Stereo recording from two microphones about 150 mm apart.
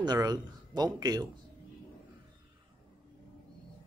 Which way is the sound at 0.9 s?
25° right (ahead or behind).